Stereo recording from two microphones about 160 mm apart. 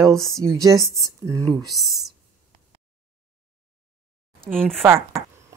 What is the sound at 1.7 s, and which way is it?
Speech, centre (ahead or behind).